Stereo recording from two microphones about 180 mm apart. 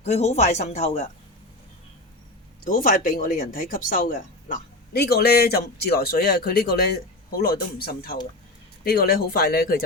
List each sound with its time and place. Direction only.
0.0 s speech: 35° left (ahead or behind)
2.6 s speech: 50° left (ahead or behind)